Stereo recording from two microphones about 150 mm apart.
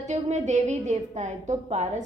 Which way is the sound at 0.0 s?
50° right (ahead or behind).